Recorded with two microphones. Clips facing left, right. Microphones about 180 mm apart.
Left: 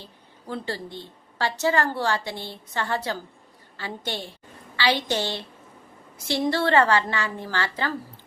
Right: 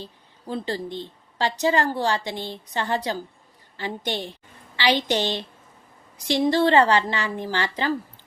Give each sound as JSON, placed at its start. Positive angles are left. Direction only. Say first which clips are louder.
{"t": 0.0, "sound": "a woman's voice", "louder": "right 4 dB", "side_deg": -15}